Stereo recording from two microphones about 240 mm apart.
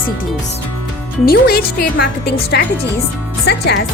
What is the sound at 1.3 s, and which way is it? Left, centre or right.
A woman's voice, left.